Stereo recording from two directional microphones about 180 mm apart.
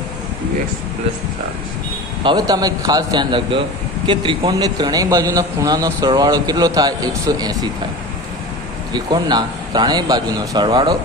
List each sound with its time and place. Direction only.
2.2 s a man's voice: 20° right (ahead or behind)
8.9 s a man's voice: 25° right (ahead or behind)